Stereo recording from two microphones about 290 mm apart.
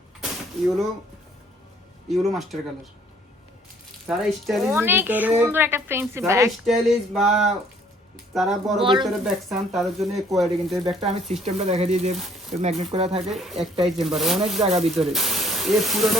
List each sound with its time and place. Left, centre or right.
2.0 s speech: centre
4.0 s speech: centre
8.8 s speech: centre
9.2 s speech: centre
10.8 s speech: right
12.1 s speech: centre
12.8 s speech: right
13.3 s speech: centre
14.6 s speech: right
14.8 s speech: centre